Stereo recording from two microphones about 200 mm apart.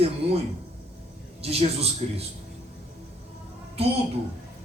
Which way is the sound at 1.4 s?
30° right (ahead or behind).